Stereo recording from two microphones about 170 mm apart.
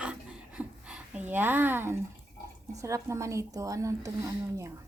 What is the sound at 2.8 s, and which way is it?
Speech, 15° right (ahead or behind).